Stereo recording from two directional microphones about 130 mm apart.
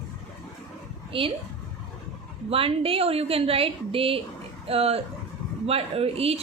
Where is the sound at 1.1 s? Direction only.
45° right (ahead or behind).